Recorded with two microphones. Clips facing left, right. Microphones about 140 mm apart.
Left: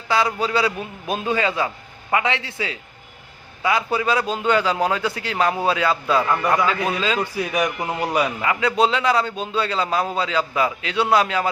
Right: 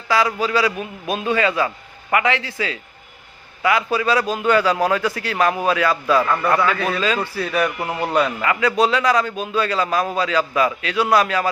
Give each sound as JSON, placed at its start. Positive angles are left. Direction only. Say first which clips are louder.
{"t": 0.1, "sound": "a man's voice", "louder": "right 1 dB", "side_deg": 25}
{"t": 6.2, "sound": "speech", "louder": "right 1 dB", "side_deg": 15}
{"t": 8.8, "sound": "a man's voice", "louder": "right 1 dB", "side_deg": 25}